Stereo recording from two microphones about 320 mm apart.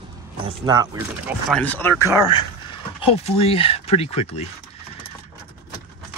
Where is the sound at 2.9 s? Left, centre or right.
Centre.